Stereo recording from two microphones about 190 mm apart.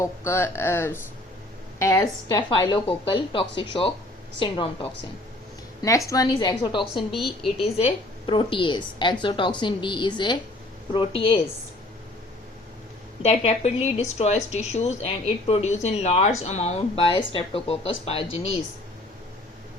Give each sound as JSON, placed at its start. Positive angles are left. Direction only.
{"t": 0.0, "sound": "speech", "side_deg": 15}
{"t": 6.1, "sound": "speech", "side_deg": 20}
{"t": 6.9, "sound": "a woman's voice", "side_deg": 0}
{"t": 7.4, "sound": "speech", "side_deg": 35}
{"t": 13.2, "sound": "a woman's voice", "side_deg": 35}